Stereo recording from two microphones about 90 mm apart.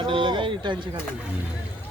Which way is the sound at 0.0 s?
65° right (ahead or behind).